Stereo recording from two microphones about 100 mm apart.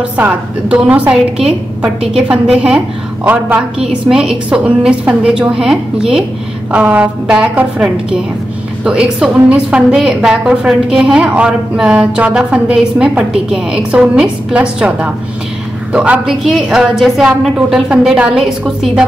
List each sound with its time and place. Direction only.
0.2 s a woman's voice: 15° right (ahead or behind)
3.3 s a woman's voice: 20° right (ahead or behind)
3.8 s a woman's voice: 5° right (ahead or behind)